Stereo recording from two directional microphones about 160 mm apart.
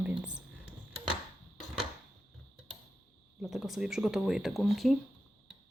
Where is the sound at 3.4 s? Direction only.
Centre (ahead or behind).